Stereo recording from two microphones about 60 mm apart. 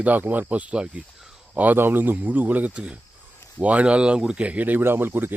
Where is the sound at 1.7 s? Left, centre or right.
Right.